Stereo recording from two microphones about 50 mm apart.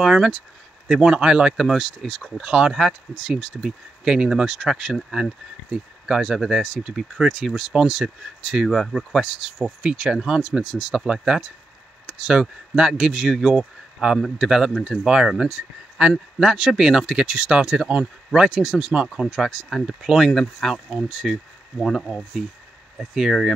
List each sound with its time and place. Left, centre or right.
0.0 s speech: centre
1.0 s speech: centre
2.3 s speech: centre
6.8 s speech: centre
7.2 s speech: centre
9.8 s speech: centre
11.1 s speech: centre
14.7 s speech: centre
15.0 s speech: centre